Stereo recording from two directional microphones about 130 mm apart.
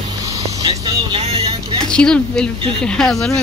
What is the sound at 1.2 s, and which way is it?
Vehicle, 50° right (ahead or behind).